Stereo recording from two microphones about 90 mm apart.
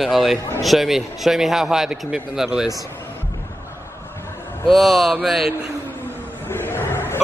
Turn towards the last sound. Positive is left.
turn(degrees=25)  # may be behind; listen again after turning